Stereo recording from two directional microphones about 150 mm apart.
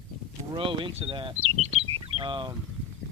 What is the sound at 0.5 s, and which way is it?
Speech, 35° right (ahead or behind).